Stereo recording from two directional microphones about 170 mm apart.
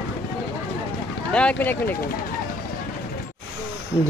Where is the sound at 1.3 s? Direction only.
5° left (ahead or behind).